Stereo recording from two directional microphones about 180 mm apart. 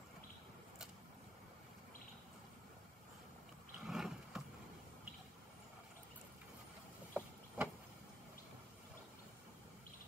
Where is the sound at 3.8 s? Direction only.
Centre (ahead or behind).